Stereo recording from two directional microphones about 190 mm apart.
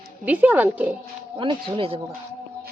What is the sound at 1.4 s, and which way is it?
Speech, 25° right (ahead or behind).